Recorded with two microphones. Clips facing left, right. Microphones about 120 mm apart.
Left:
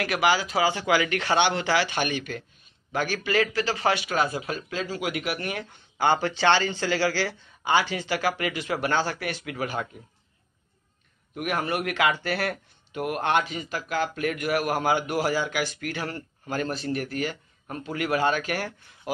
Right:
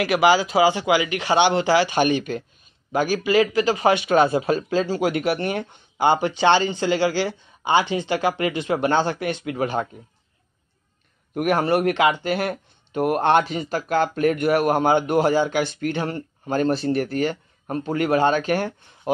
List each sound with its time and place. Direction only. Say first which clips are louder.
0.0 s speech: right 6 dB; 20° right (ahead or behind)
11.3 s a man's voice: right 8 dB; 35° right (ahead or behind)
12.0 s speech: right 5 dB; 20° right (ahead or behind)
12.9 s speech: right 7 dB; 30° right (ahead or behind)